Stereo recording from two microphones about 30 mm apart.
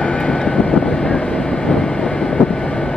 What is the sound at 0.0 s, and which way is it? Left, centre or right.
Vehicle, left.